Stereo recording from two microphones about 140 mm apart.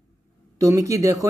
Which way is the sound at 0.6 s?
25° right (ahead or behind).